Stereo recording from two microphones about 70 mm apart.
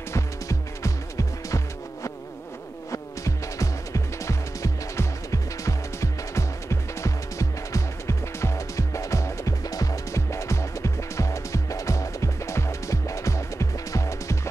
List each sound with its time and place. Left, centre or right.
0.1 s music: left
2.9 s music: left